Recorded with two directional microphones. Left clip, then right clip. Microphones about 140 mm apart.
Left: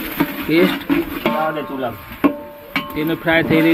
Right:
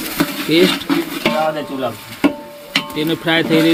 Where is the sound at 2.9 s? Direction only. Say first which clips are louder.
Left 1 dB; 10° right (ahead or behind).